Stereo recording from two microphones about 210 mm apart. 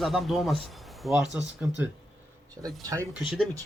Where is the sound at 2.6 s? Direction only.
15° right (ahead or behind).